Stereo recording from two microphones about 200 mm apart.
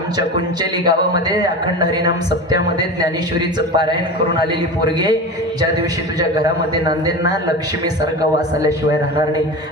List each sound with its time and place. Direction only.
0.2 s a man's voice: 20° right (ahead or behind)
4.9 s a man's voice: 20° right (ahead or behind)
6.1 s a man's voice: 20° right (ahead or behind)